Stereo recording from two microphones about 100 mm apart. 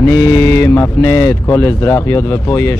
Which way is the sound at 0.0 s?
25° left (ahead or behind).